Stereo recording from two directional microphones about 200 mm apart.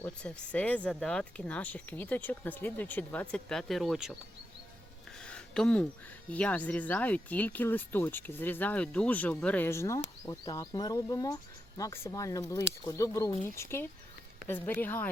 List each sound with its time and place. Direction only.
0.0 s speech: 5° left (ahead or behind)
5.2 s a sound: 5° left (ahead or behind)
6.3 s speech: 5° left (ahead or behind)